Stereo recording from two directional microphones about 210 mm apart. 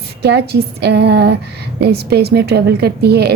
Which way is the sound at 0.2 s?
50° right (ahead or behind).